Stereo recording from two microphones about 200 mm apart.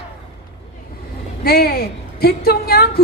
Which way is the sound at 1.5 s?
50° left (ahead or behind).